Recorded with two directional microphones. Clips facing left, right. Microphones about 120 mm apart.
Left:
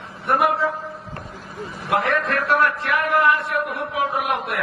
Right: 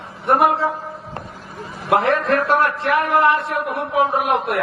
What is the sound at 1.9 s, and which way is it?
A man's voice, 30° right (ahead or behind).